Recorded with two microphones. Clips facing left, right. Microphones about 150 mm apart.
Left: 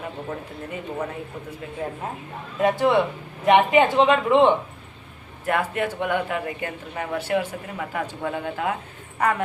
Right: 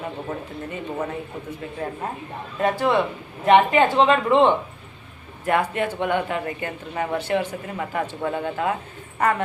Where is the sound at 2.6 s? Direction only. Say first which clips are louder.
Left 1 dB; 15° left (ahead or behind).